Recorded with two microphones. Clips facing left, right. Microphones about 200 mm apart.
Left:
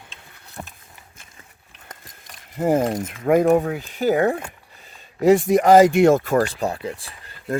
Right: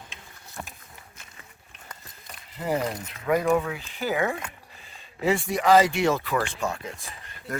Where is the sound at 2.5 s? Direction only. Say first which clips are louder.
Left 8 dB; 50° left (ahead or behind).